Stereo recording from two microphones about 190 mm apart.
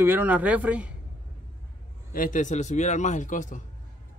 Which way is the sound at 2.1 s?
45° left (ahead or behind).